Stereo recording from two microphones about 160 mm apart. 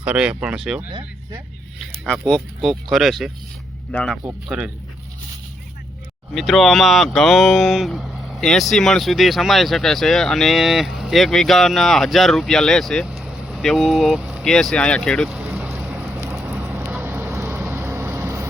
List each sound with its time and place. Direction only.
0.0 s speech: 10° right (ahead or behind)
6.3 s speech: centre (ahead or behind)
15.9 s vehicle: 10° right (ahead or behind)